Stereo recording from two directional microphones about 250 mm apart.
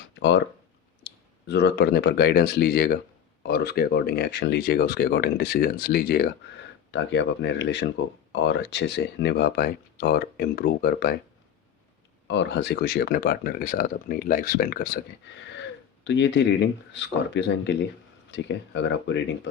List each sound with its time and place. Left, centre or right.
0.1 s a sound: left
1.0 s speech: left
12.3 s speech: left
16.0 s speech: left